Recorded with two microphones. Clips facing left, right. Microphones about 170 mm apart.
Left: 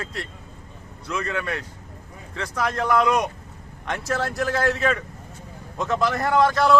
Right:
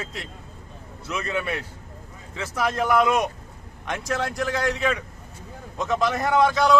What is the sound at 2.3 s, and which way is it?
Speech, 5° right (ahead or behind).